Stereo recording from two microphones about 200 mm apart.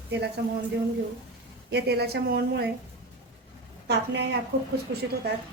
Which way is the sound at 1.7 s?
55° right (ahead or behind).